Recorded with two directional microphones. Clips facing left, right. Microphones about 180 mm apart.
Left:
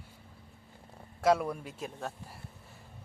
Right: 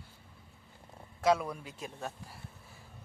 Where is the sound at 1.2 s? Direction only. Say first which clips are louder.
Left 2 dB; 5° left (ahead or behind).